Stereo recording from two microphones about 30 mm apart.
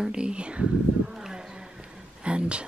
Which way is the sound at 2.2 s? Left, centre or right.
Right.